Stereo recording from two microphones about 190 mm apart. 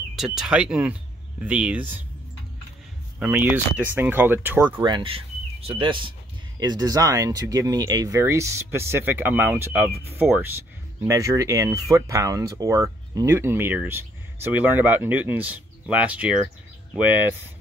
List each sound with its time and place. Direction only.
0.1 s speech: centre (ahead or behind)
3.2 s speech: 10° right (ahead or behind)
4.8 s speech: 25° right (ahead or behind); by 17.4 s 10° right (ahead or behind)